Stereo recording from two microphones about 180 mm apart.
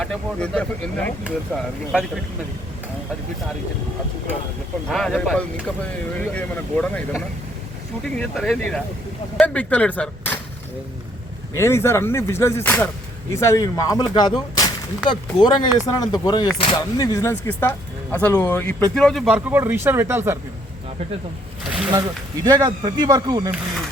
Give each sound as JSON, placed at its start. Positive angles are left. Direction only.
{"t": 0.0, "sound": "speech", "side_deg": 5}
{"t": 4.9, "sound": "speech", "side_deg": 5}
{"t": 11.5, "sound": "speech", "side_deg": 15}
{"t": 21.6, "sound": "a sound", "side_deg": -5}
{"t": 22.4, "sound": "speech", "side_deg": -20}